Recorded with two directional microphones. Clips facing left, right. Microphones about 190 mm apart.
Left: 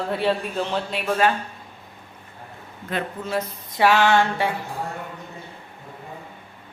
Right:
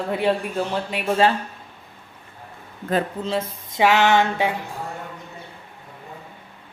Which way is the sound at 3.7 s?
20° right (ahead or behind).